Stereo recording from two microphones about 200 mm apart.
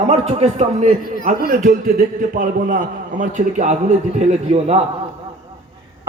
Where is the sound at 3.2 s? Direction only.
35° right (ahead or behind).